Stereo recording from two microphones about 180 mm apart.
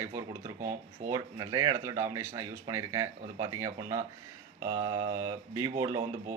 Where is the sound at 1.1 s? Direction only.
20° right (ahead or behind).